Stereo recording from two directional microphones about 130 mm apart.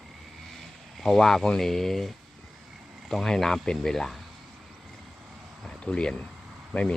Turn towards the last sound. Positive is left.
turn(degrees=10)  # may be behind; listen again after turning